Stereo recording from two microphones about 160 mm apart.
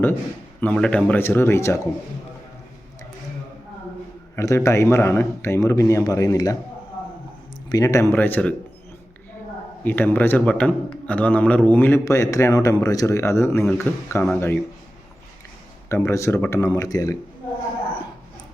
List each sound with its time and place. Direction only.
0.6 s a man's voice: 10° left (ahead or behind)
4.4 s a man's voice: 20° left (ahead or behind)
7.7 s a man's voice: 20° left (ahead or behind)
9.8 s a man's voice: 10° left (ahead or behind)
15.9 s speech: 20° left (ahead or behind)